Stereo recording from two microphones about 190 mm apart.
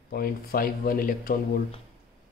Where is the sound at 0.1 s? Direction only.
50° left (ahead or behind).